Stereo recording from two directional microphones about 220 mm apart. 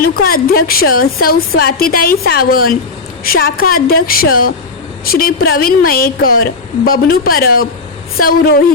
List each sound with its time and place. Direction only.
0.0 s a woman's voice: 40° left (ahead or behind)